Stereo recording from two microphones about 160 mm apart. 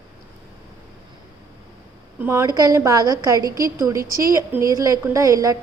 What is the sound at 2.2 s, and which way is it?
A woman's voice, 15° right (ahead or behind).